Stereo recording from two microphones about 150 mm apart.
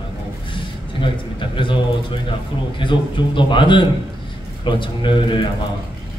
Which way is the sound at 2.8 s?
35° left (ahead or behind).